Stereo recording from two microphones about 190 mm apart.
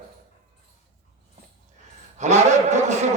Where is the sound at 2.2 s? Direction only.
35° right (ahead or behind).